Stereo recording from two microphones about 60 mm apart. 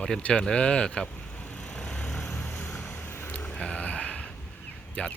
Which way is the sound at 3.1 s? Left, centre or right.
Left.